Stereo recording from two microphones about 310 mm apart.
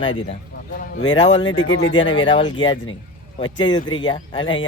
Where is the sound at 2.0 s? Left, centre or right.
Centre.